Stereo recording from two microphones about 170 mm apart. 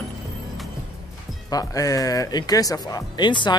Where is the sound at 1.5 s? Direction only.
20° left (ahead or behind).